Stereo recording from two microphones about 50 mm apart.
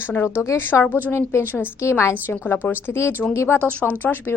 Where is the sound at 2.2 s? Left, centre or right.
Left.